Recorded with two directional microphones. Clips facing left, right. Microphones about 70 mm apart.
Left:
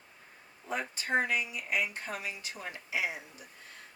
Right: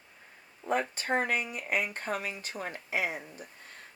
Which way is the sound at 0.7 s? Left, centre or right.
Right.